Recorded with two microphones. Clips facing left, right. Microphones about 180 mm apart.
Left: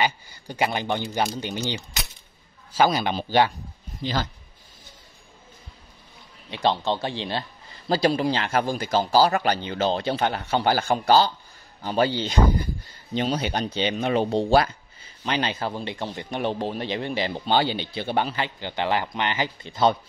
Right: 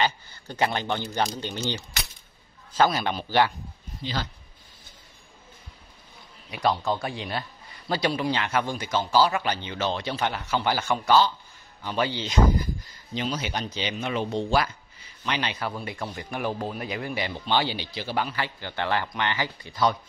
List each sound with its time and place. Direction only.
0.0 s a man's voice: 10° left (ahead or behind)
4.0 s a man's voice: 45° left (ahead or behind)
6.5 s a man's voice: 25° left (ahead or behind)
18.1 s speech: 25° left (ahead or behind)